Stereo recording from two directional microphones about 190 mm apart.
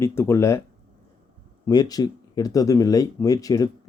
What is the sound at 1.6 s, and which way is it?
Speech, 20° left (ahead or behind).